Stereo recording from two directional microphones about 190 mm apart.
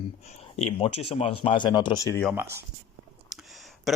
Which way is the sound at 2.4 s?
10° right (ahead or behind).